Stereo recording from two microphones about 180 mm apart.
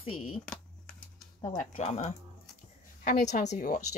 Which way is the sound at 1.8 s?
40° left (ahead or behind).